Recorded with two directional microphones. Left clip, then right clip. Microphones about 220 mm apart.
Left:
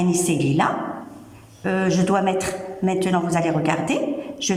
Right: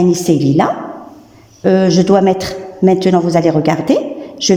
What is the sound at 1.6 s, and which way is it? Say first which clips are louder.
A man's voice: right 10 dB; 20° right (ahead or behind).